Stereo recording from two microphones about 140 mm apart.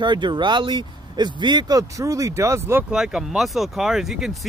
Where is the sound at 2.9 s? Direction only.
5° right (ahead or behind).